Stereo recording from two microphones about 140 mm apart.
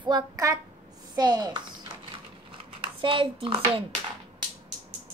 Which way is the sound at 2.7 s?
40° right (ahead or behind).